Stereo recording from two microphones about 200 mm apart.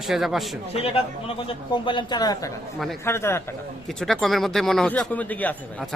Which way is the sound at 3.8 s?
Centre (ahead or behind).